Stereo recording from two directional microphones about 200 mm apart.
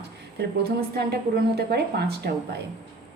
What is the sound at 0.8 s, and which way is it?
A woman's voice, 50° right (ahead or behind).